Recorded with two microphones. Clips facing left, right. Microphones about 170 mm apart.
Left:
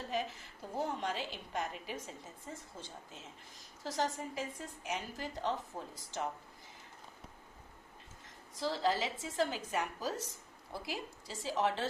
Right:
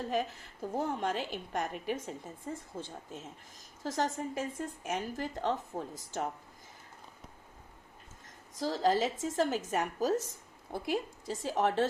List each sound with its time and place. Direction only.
0.8 s a woman's voice: 50° right (ahead or behind)
8.5 s a woman's voice: 45° right (ahead or behind)